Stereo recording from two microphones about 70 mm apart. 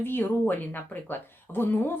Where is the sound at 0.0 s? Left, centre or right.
Left.